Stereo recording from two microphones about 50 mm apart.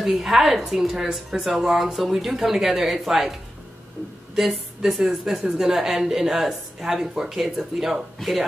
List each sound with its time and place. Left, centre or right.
0.0 s speech: centre
4.4 s a woman's voice: centre